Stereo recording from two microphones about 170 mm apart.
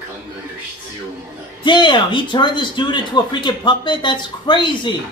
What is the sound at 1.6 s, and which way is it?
Speech, 25° left (ahead or behind).